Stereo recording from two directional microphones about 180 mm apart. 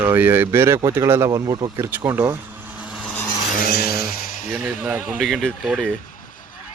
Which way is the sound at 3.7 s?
60° left (ahead or behind).